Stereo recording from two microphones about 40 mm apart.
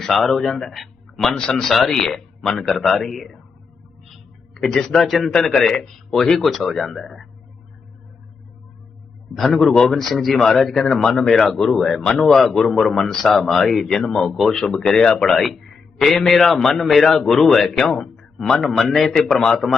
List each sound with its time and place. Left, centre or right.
0.0 s speech: centre
1.4 s speech: left
1.6 s a man's voice: centre
4.5 s a man's voice: centre
5.4 s a man's voice: centre
9.3 s a man's voice: centre
15.3 s a man's voice: centre
18.2 s a sound: centre
18.8 s speech: centre